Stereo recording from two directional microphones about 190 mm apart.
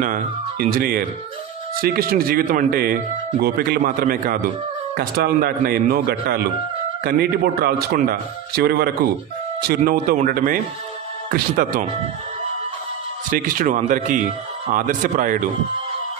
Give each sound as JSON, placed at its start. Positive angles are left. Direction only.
{"t": 0.0, "sound": "speech", "side_deg": -45}
{"t": 13.3, "sound": "speech", "side_deg": -45}